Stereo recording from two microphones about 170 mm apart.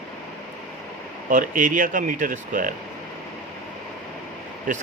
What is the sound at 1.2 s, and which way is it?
Speech, 50° right (ahead or behind).